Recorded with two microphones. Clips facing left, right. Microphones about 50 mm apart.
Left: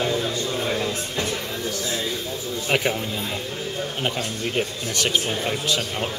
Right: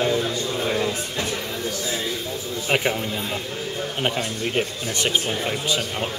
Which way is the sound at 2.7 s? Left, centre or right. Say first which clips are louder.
Right 1 dB; centre.